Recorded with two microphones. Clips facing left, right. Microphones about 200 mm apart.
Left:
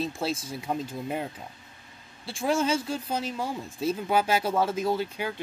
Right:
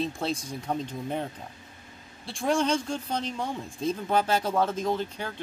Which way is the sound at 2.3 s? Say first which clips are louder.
Even; centre (ahead or behind).